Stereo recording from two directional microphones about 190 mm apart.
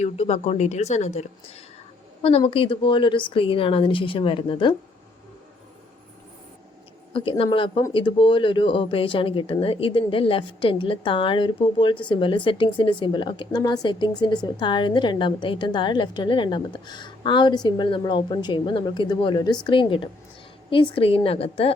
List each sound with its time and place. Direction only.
0.0 s a woman's voice: 35° left (ahead or behind)
7.1 s a woman's voice: 30° left (ahead or behind)